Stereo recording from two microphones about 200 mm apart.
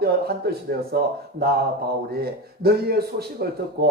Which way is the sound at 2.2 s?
50° right (ahead or behind).